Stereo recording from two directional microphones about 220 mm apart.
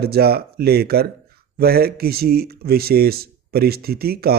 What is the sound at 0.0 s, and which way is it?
Speech, 45° right (ahead or behind).